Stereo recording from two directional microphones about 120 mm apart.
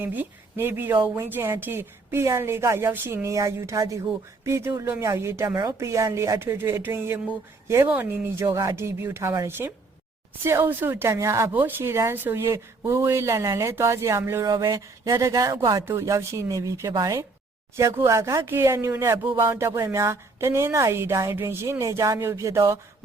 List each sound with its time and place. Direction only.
0.0 s speech: 15° right (ahead or behind)
14.5 s speech: 35° right (ahead or behind)